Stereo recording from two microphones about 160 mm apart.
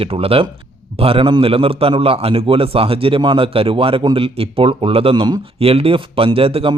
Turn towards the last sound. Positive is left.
turn(degrees=-35)  # may be behind; listen again after turning